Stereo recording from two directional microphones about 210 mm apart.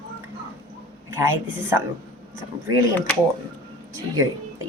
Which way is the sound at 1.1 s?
10° right (ahead or behind).